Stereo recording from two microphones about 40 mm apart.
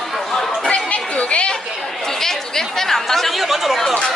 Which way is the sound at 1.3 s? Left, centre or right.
Left.